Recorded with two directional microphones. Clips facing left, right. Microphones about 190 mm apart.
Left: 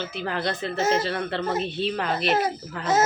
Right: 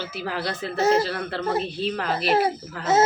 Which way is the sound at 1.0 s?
Centre (ahead or behind).